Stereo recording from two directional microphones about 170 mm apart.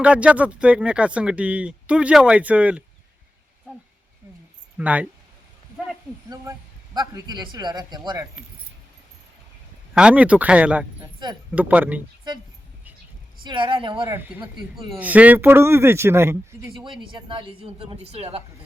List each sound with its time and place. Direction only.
0.0 s speech: 5° right (ahead or behind)
6.3 s a man's voice: 20° right (ahead or behind)
9.9 s speech: 5° right (ahead or behind)
11.0 s a sound: 25° right (ahead or behind)
11.5 s speech: 10° right (ahead or behind)
13.4 s a man's voice: 30° right (ahead or behind)
14.1 s speech: 10° right (ahead or behind)
17.1 s a woman's voice: 30° right (ahead or behind)